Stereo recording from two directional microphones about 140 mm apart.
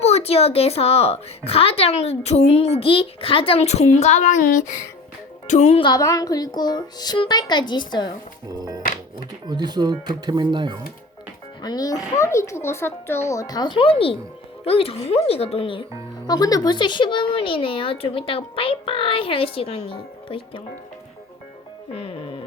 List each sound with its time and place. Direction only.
0.0 s a child's voice: 50° left (ahead or behind); by 4.8 s 70° left (ahead or behind)
5.5 s a child's voice: 55° left (ahead or behind)
5.8 s a child's voice: 25° left (ahead or behind)
8.5 s music: 25° right (ahead or behind)
9.5 s speech: 30° right (ahead or behind)
11.6 s a child's voice: 30° left (ahead or behind)
21.9 s a child's voice: 45° left (ahead or behind)